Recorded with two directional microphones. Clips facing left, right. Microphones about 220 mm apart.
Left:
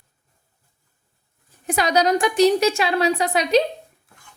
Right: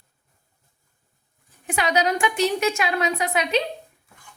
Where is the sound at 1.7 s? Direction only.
40° left (ahead or behind).